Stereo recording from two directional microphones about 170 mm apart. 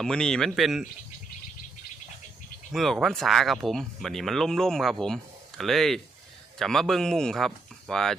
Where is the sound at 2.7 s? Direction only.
Centre (ahead or behind).